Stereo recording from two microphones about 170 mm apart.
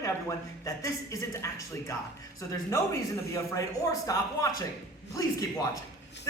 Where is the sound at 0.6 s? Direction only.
20° left (ahead or behind).